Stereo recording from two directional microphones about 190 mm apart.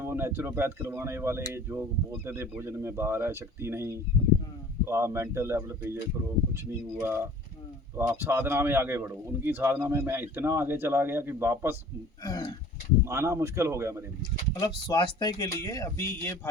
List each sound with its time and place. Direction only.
0.0 s a man's voice: 15° right (ahead or behind)
12.2 s speech: 20° left (ahead or behind)
13.1 s a man's voice: 15° right (ahead or behind)
14.6 s speech: 20° left (ahead or behind)